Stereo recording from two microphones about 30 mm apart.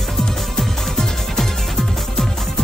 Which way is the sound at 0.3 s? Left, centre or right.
Centre.